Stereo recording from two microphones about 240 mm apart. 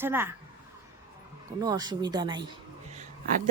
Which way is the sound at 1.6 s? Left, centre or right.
Centre.